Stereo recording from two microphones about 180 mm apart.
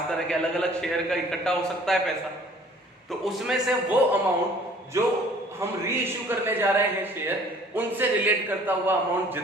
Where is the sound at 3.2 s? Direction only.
Centre (ahead or behind).